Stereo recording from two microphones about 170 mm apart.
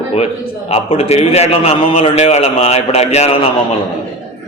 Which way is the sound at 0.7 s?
40° left (ahead or behind).